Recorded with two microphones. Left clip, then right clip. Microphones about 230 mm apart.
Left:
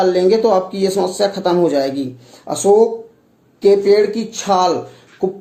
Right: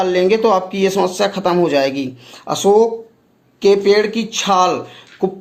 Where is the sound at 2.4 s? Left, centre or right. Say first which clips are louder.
Right 1 dB; right.